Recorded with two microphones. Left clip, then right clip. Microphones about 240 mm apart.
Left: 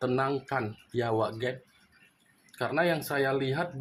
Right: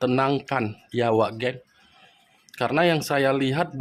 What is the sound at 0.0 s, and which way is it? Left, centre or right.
Speech, right.